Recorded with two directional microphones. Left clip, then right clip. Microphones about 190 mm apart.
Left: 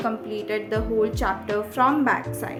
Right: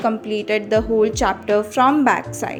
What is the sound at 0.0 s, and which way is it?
A woman's voice, 35° right (ahead or behind).